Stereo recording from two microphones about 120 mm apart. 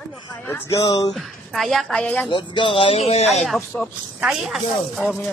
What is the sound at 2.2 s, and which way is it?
Speech, 40° left (ahead or behind).